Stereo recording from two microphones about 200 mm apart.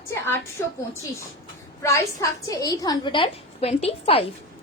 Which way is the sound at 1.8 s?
15° left (ahead or behind).